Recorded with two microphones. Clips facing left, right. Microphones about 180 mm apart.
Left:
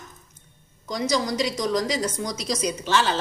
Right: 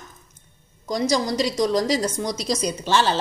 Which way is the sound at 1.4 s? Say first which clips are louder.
Right 3 dB; 30° right (ahead or behind).